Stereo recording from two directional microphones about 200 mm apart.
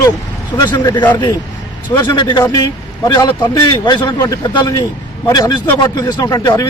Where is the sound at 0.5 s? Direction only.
20° left (ahead or behind).